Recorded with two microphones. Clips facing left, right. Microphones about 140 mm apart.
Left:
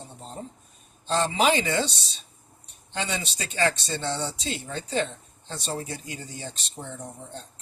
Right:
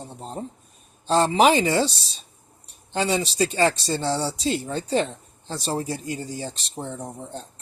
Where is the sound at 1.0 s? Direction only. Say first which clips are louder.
Right 5 dB; 50° right (ahead or behind).